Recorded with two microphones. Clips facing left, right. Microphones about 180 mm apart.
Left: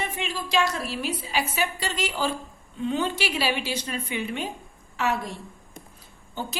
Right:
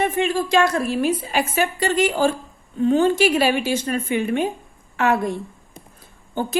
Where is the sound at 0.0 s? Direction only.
50° right (ahead or behind).